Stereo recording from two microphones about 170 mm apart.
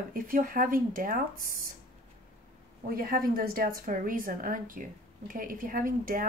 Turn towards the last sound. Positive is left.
turn(degrees=-55)  # may be behind; listen again after turning